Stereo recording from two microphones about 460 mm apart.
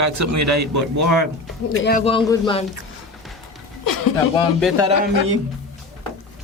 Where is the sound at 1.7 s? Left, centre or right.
Centre.